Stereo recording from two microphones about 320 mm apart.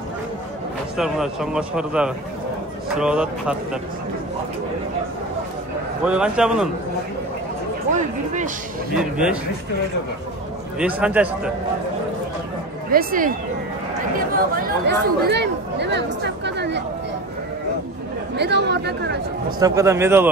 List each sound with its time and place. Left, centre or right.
0.9 s a man's voice: centre
6.0 s a man's voice: centre
8.9 s a man's voice: centre
10.8 s a man's voice: centre
12.9 s speech: right
14.5 s speech: right
16.4 s a sound: right
18.3 s speech: right
19.6 s a man's voice: centre